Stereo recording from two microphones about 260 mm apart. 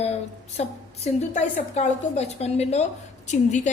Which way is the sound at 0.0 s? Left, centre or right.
Left.